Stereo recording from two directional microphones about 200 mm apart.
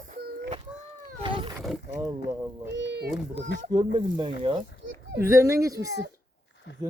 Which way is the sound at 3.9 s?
25° right (ahead or behind).